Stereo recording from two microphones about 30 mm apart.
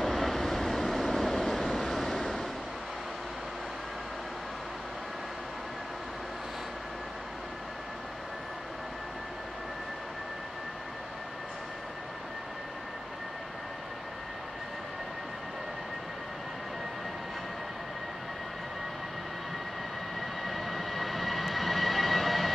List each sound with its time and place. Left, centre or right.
0.0 s vehicle: centre
20.2 s vehicle: centre